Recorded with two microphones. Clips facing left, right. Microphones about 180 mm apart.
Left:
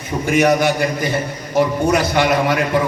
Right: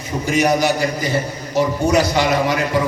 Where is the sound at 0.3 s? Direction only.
55° left (ahead or behind).